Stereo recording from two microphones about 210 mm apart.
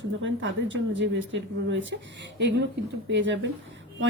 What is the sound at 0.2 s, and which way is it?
A woman's voice, 60° right (ahead or behind).